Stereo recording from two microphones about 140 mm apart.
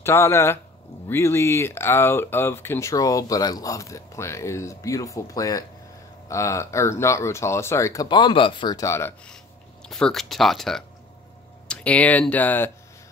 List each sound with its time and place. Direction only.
0.0 s speech: 20° left (ahead or behind)
9.8 s speech: 5° left (ahead or behind)